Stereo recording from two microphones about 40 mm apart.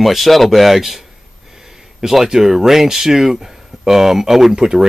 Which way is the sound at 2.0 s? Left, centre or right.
Centre.